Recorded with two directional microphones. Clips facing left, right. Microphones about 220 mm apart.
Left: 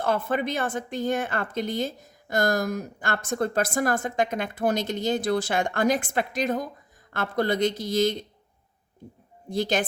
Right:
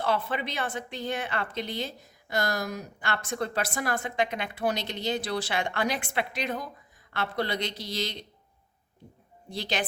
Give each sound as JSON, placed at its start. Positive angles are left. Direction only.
{"t": 0.0, "sound": "speech", "side_deg": 50}
{"t": 9.5, "sound": "speech", "side_deg": 50}